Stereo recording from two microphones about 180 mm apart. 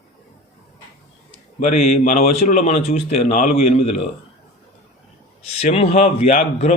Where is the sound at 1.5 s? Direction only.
45° left (ahead or behind).